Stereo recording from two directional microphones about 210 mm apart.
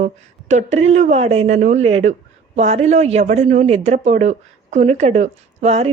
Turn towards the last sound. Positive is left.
turn(degrees=-30)  # may be behind; listen again after turning